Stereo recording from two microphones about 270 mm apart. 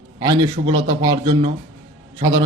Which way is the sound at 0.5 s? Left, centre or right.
Centre.